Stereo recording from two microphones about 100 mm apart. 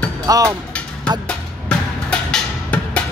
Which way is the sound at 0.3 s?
35° right (ahead or behind).